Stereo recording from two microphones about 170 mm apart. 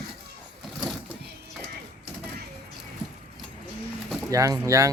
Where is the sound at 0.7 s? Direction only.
Centre (ahead or behind).